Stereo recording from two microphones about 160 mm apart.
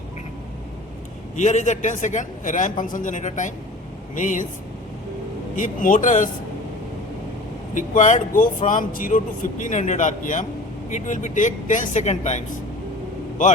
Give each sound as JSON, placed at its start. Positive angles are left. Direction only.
{"t": 1.4, "sound": "speech", "side_deg": 50}
{"t": 5.5, "sound": "speech", "side_deg": 55}
{"t": 7.8, "sound": "speech", "side_deg": 50}
{"t": 13.4, "sound": "speech", "side_deg": 55}